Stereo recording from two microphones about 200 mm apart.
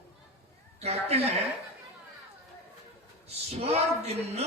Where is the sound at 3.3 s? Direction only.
30° right (ahead or behind).